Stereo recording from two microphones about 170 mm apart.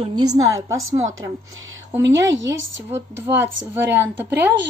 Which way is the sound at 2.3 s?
90° right.